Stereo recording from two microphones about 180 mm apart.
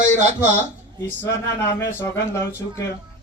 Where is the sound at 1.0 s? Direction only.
15° left (ahead or behind).